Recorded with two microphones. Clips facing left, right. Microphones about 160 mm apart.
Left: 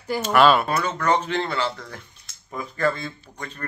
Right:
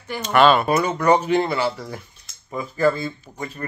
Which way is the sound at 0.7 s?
10° right (ahead or behind).